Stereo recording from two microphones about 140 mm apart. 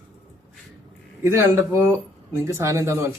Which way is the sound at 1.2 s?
20° right (ahead or behind).